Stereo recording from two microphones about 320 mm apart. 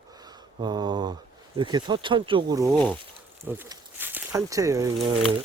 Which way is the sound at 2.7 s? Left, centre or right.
Centre.